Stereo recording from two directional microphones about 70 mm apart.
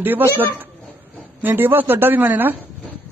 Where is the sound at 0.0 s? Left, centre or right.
Right.